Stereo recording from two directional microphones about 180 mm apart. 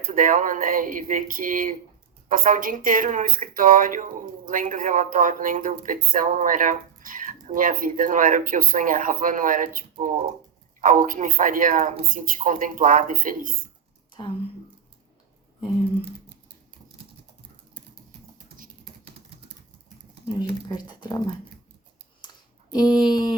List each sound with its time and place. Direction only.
0.0 s speech: 45° right (ahead or behind)
20.4 s speech: 25° left (ahead or behind)
22.7 s a sound: 25° left (ahead or behind)
23.0 s speech: 25° left (ahead or behind)